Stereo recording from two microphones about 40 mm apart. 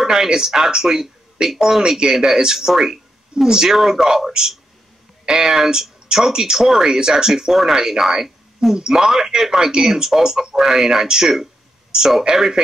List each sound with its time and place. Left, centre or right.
0.0 s speech: centre